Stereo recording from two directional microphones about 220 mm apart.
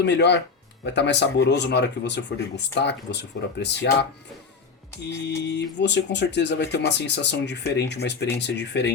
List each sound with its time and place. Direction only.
0.0 s speech: 50° left (ahead or behind)
5.5 s speech: 50° left (ahead or behind)